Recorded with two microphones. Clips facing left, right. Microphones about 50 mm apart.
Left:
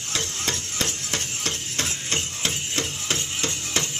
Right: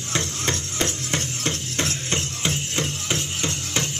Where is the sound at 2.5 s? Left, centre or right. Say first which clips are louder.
Right 3 dB; centre.